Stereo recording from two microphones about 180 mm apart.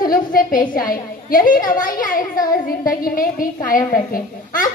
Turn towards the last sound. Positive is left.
turn(degrees=50)  # may be behind; listen again after turning